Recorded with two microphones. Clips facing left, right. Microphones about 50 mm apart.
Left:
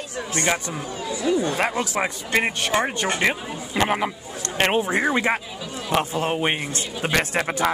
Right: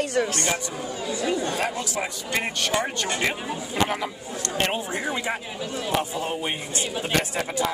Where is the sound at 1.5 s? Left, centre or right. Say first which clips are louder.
Left 4 dB; left.